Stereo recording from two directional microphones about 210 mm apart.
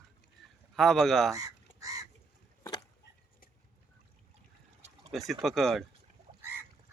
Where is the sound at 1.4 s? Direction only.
15° right (ahead or behind).